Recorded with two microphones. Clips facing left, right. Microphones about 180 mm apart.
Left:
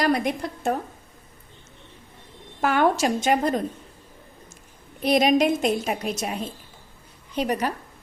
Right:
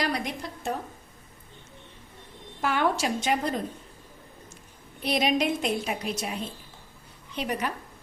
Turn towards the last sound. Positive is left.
turn(degrees=40)  # may be behind; listen again after turning